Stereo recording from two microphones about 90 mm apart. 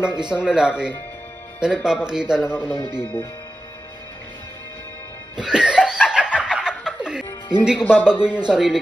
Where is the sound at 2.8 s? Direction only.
25° left (ahead or behind).